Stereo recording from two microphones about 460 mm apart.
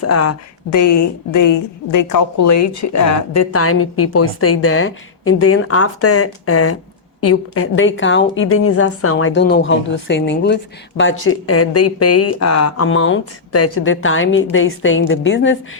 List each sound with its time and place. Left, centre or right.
0.0 s a woman's voice: left